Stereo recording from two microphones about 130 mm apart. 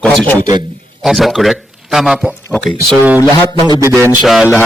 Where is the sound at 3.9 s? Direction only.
20° right (ahead or behind).